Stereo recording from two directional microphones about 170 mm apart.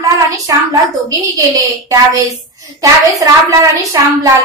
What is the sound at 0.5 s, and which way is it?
A woman's voice, 20° right (ahead or behind).